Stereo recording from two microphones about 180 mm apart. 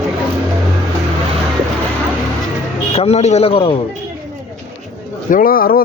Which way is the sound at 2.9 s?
35° left (ahead or behind).